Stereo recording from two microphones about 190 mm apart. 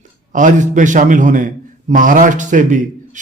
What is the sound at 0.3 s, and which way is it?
A man's voice, 40° right (ahead or behind).